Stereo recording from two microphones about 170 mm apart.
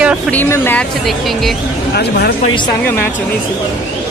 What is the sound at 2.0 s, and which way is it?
Speech, 75° left (ahead or behind).